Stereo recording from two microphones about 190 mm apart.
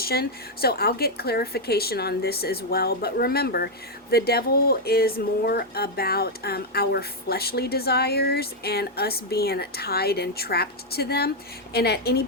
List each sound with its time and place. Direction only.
0.0 s speech: 55° left (ahead or behind)